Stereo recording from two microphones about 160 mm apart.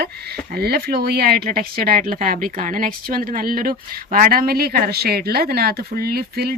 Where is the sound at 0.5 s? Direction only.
80° right.